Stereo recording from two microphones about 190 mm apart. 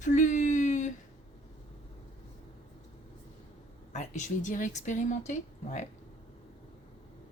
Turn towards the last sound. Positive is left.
turn(degrees=40)  # may be behind; listen again after turning